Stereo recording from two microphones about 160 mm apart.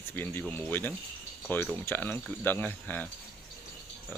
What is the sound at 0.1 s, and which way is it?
Speech, 15° left (ahead or behind).